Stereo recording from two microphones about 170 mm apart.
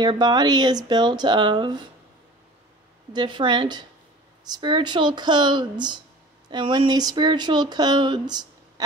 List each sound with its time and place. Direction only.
0.0 s speech: 25° right (ahead or behind)
3.1 s speech: 25° right (ahead or behind)